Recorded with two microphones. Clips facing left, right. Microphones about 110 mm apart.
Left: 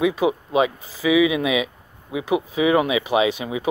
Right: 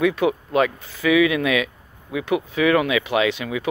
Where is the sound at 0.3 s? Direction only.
20° left (ahead or behind).